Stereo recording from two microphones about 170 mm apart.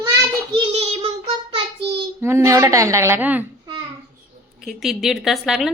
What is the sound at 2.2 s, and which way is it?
A woman's voice, 15° right (ahead or behind).